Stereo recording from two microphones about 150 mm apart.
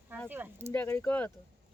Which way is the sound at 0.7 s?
15° left (ahead or behind).